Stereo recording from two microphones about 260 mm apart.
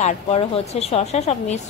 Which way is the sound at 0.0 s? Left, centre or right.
Left.